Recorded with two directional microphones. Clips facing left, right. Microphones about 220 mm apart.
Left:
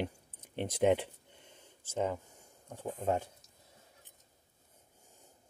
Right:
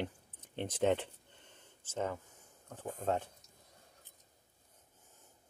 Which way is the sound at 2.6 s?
10° left (ahead or behind).